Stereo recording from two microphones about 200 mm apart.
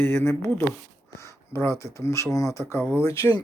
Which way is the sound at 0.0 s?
10° left (ahead or behind).